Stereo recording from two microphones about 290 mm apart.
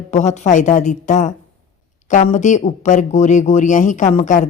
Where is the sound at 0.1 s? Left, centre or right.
Left.